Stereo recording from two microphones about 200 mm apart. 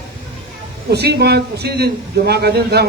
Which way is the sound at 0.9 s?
55° right (ahead or behind).